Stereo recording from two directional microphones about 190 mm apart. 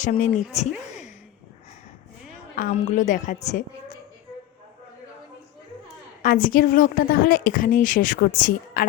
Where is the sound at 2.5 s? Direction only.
45° left (ahead or behind).